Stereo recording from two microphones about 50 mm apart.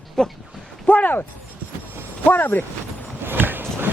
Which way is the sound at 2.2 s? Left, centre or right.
Left.